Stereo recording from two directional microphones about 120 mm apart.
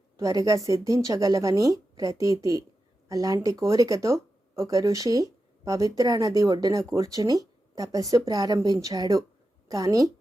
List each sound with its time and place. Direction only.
0.2 s speech: 25° right (ahead or behind)